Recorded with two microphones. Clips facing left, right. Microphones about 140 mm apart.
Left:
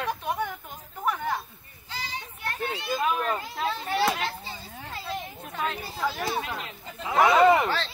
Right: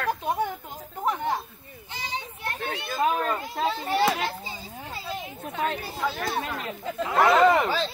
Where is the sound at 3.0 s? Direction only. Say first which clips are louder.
Right 4 dB; 35° right (ahead or behind).